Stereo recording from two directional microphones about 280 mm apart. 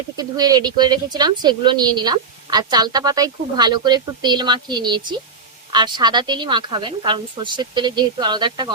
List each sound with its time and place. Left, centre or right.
0.2 s speech: centre